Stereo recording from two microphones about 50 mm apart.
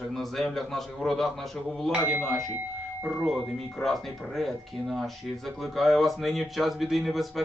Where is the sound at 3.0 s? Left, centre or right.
Right.